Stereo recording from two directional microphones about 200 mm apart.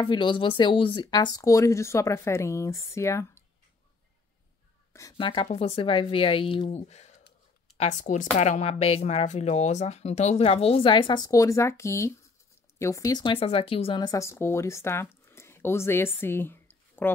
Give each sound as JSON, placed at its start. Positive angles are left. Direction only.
{"t": 0.0, "sound": "speech", "side_deg": 25}
{"t": 4.9, "sound": "a woman's voice", "side_deg": 20}